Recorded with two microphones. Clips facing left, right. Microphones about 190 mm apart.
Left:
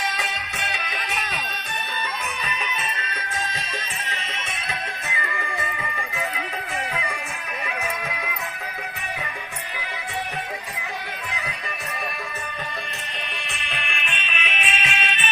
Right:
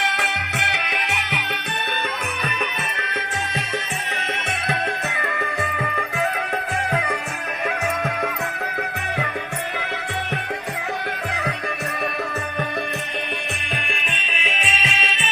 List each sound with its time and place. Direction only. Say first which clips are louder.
0.0 s music: right 3 dB; 70° right (ahead or behind)
4.7 s music: right 8 dB; 65° right (ahead or behind)
11.3 s music: right 7 dB; 65° right (ahead or behind)
13.8 s music: right 2 dB; 35° right (ahead or behind)